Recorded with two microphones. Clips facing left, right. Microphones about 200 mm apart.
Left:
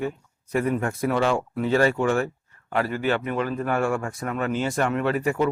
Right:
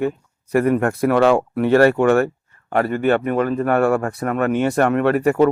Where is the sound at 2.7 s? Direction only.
55° right (ahead or behind).